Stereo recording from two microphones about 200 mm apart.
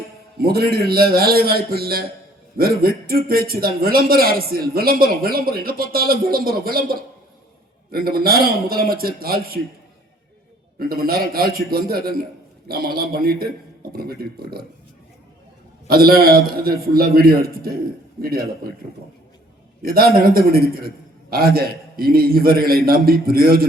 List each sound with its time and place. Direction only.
0.3 s a man's voice: 50° right (ahead or behind)
10.8 s a man's voice: 50° right (ahead or behind)
15.9 s a man's voice: 50° right (ahead or behind)
19.8 s a man's voice: 50° right (ahead or behind)